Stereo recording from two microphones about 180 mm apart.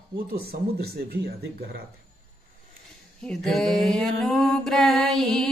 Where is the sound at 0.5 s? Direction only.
60° right (ahead or behind).